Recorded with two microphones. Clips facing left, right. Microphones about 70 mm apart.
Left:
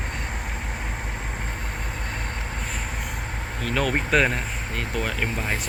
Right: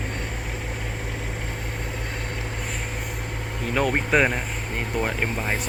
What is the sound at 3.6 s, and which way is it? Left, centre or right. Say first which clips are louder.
Speech: right 1 dB; centre.